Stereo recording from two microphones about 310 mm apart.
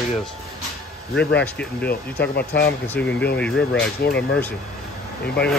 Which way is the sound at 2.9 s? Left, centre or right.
Centre.